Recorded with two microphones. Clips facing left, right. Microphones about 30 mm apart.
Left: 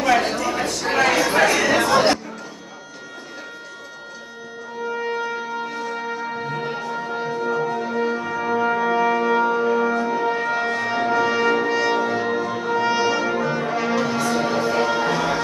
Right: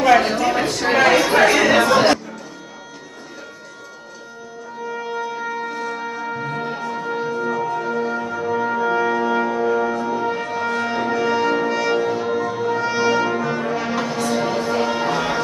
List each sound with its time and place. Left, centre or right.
0.0 s a sound: centre
0.8 s chatter: centre
6.5 s music: centre